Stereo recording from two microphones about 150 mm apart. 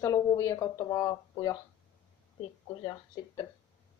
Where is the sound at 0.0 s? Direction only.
20° left (ahead or behind).